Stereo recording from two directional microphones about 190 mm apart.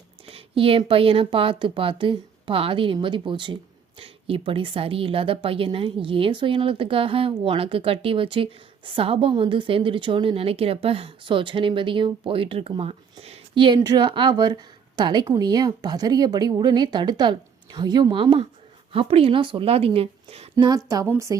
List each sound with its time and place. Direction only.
0.3 s speech: 30° right (ahead or behind)
20.7 s a woman's voice: 20° right (ahead or behind)